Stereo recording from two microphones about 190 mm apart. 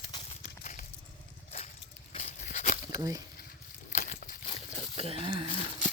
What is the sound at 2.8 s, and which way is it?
Speech, 20° right (ahead or behind).